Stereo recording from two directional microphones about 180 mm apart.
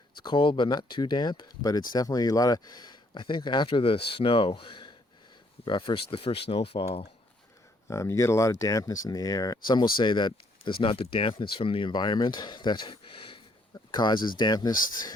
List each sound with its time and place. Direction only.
0.2 s speech: 25° left (ahead or behind)
7.9 s speech: 15° left (ahead or behind)